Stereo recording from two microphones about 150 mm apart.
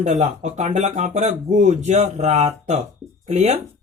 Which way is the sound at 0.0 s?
55° right (ahead or behind).